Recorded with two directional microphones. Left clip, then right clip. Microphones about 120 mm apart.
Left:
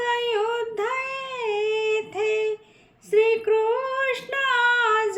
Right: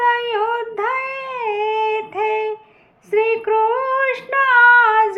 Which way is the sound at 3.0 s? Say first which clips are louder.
Right 2 dB; 15° left (ahead or behind).